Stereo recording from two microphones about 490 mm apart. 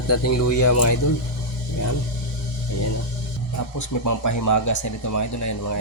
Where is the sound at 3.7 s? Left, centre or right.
Left.